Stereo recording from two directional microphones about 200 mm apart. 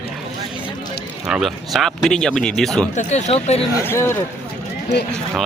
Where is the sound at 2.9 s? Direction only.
35° left (ahead or behind).